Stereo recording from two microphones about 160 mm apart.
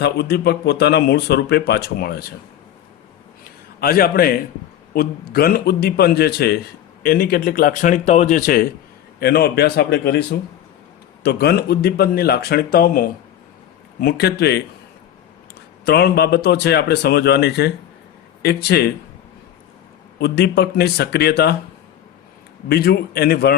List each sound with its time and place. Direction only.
0.0 s speech: 90° left
3.4 s a sound: 70° left (ahead or behind)
4.9 s a man's voice: 70° left (ahead or behind)
9.1 s a man's voice: 75° left (ahead or behind)
14.0 s speech: 85° left
15.8 s a man's voice: 85° left
20.1 s a man's voice: 85° left
22.7 s speech: 75° left (ahead or behind)